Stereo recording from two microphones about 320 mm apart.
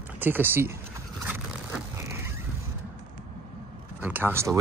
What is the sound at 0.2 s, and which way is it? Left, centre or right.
Speech, centre.